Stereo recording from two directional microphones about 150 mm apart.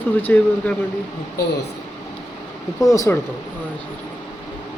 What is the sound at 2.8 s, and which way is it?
Speech, 20° left (ahead or behind).